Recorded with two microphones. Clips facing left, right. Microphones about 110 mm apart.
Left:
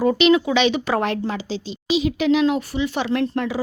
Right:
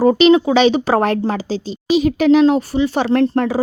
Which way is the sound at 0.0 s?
35° right (ahead or behind).